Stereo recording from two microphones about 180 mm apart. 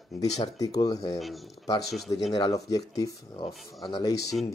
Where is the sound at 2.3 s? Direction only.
20° left (ahead or behind).